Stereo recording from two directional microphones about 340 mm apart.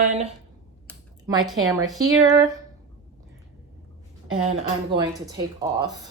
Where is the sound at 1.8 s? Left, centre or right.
Centre.